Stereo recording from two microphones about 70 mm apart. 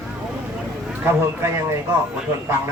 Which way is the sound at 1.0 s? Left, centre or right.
Right.